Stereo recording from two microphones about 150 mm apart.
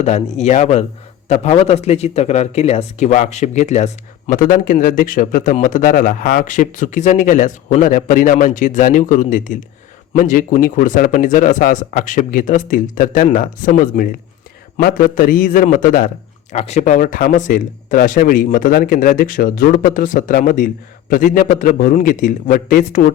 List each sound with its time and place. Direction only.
0.0 s speech: 50° left (ahead or behind)
4.3 s a man's voice: 65° left (ahead or behind)
16.5 s speech: 50° left (ahead or behind); by 23.1 s 70° left (ahead or behind)